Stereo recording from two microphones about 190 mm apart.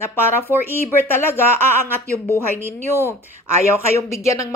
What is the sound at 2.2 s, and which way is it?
Speech, 10° right (ahead or behind).